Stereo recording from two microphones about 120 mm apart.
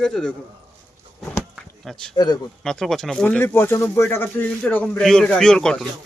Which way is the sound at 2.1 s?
35° left (ahead or behind).